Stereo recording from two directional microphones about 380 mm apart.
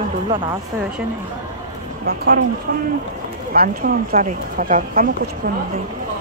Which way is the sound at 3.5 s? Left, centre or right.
Right.